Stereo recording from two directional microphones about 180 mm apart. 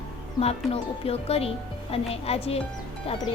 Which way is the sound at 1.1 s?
35° left (ahead or behind).